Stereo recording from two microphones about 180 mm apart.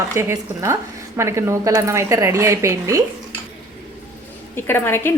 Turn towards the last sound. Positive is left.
turn(degrees=10)  # may be behind; listen again after turning